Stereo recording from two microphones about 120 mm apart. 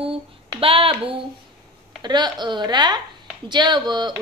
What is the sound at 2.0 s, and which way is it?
Speech, 35° right (ahead or behind).